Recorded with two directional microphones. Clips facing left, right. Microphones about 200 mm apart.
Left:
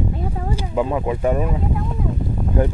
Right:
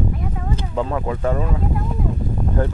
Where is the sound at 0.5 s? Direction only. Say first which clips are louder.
Left 2 dB; 10° left (ahead or behind).